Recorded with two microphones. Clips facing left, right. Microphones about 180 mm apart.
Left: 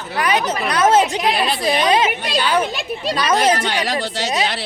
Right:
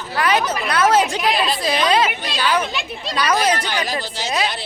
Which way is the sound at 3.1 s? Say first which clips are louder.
Even; 25° left (ahead or behind).